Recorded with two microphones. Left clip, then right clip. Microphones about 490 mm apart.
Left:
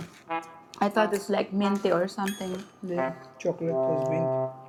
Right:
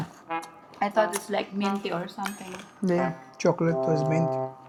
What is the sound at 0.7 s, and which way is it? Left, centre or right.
Speech, centre.